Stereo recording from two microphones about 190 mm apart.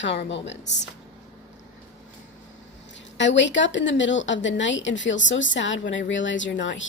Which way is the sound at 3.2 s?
70° left (ahead or behind).